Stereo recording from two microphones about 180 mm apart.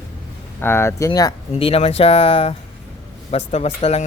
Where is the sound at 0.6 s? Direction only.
15° left (ahead or behind).